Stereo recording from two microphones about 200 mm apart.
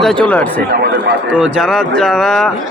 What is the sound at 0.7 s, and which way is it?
Speech, 50° right (ahead or behind).